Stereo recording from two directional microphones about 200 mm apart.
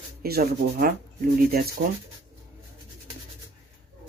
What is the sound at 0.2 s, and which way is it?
Speech, 50° right (ahead or behind).